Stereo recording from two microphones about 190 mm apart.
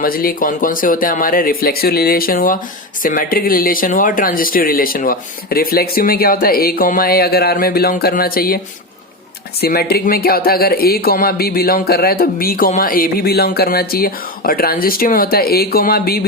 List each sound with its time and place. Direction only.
0.0 s speech: 50° left (ahead or behind)